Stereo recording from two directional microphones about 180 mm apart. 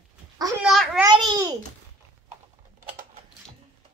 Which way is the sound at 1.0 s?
20° right (ahead or behind).